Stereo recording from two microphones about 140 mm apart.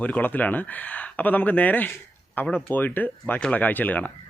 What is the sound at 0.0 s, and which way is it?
Speech, 10° left (ahead or behind).